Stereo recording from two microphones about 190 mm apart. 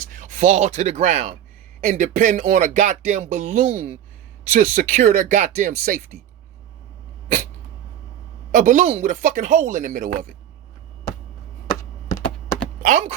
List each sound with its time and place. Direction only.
0.1 s speech: 45° right (ahead or behind)
8.5 s speech: 40° right (ahead or behind)
11.7 s computer keyboard: 15° left (ahead or behind)
12.8 s speech: 45° right (ahead or behind)